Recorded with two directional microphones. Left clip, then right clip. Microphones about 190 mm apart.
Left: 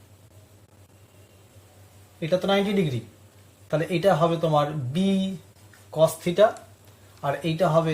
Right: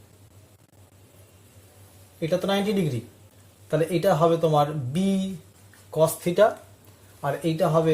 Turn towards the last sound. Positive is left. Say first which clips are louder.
# even
turn(degrees=-40)  # may be behind; listen again after turning